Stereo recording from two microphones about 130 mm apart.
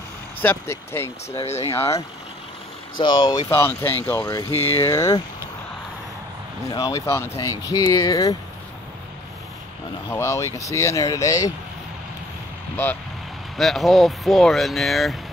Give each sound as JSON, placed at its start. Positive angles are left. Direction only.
{"t": 0.4, "sound": "speech", "side_deg": 15}
{"t": 1.4, "sound": "speech", "side_deg": 55}
{"t": 1.7, "sound": "speech", "side_deg": 25}
{"t": 6.7, "sound": "speech", "side_deg": 30}
{"t": 10.0, "sound": "speech", "side_deg": 20}
{"t": 13.6, "sound": "speech", "side_deg": 0}